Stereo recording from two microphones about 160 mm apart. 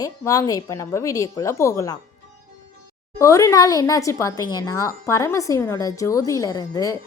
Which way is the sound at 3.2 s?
20° left (ahead or behind).